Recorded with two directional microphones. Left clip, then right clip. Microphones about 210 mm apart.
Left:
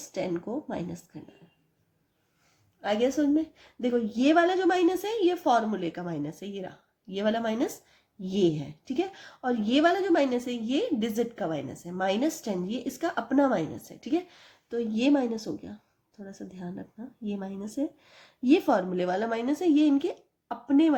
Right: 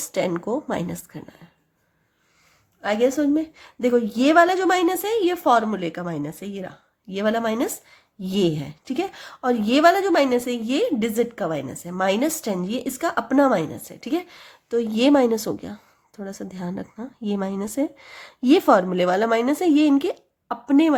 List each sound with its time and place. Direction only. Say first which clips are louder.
0.1 s speech: right 8 dB; 35° right (ahead or behind)
2.8 s a woman's voice: right 6 dB; 20° right (ahead or behind)